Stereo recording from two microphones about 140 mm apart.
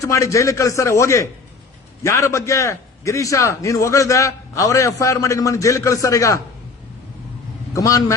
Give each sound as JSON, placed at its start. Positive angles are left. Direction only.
{"t": 0.0, "sound": "a man's voice", "side_deg": 20}
{"t": 7.7, "sound": "a man's voice", "side_deg": 25}